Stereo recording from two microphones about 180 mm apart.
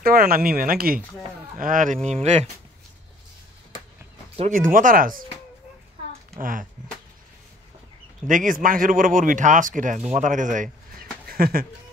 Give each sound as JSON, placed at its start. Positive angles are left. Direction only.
{"t": 0.0, "sound": "speech", "side_deg": -55}
{"t": 4.4, "sound": "speech", "side_deg": -45}
{"t": 6.4, "sound": "speech", "side_deg": -50}
{"t": 8.3, "sound": "speech", "side_deg": -45}